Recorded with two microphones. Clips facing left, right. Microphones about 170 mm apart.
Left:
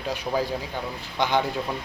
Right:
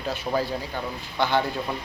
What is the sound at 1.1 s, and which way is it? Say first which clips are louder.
Speech: even; 15° left (ahead or behind).